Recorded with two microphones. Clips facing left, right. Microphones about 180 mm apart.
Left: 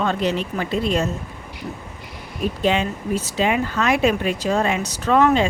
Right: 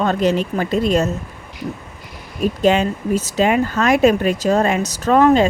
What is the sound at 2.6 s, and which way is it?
Speech, 40° right (ahead or behind).